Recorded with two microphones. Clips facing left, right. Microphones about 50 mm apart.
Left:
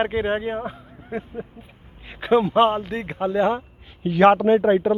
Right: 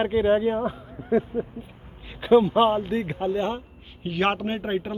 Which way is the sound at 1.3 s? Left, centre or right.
Centre.